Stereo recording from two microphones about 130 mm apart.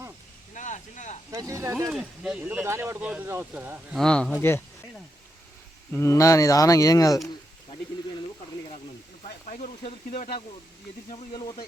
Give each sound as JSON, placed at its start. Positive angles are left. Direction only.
{"t": 0.5, "sound": "a sound", "side_deg": 70}
{"t": 1.3, "sound": "speech", "side_deg": -25}
{"t": 1.9, "sound": "speech", "side_deg": -5}
{"t": 2.6, "sound": "speech", "side_deg": -20}
{"t": 3.9, "sound": "speech", "side_deg": 5}
{"t": 5.9, "sound": "speech", "side_deg": 20}
{"t": 9.2, "sound": "speech", "side_deg": 75}
{"t": 11.1, "sound": "speech", "side_deg": 40}